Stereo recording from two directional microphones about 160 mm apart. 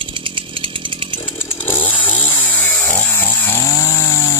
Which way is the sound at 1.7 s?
10° left (ahead or behind).